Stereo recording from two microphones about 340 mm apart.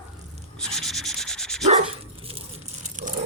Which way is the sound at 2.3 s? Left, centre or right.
Centre.